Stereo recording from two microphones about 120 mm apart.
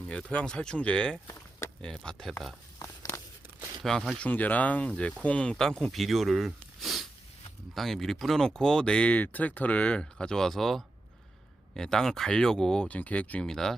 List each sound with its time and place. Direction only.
0.1 s speech: 10° left (ahead or behind)
1.3 s a sound: 20° left (ahead or behind)
1.8 s speech: 5° left (ahead or behind)
2.7 s a sound: 25° left (ahead or behind)
3.8 s speech: centre (ahead or behind)
4.2 s speech: 15° left (ahead or behind)